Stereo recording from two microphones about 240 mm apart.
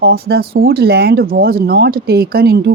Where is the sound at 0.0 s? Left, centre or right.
Right.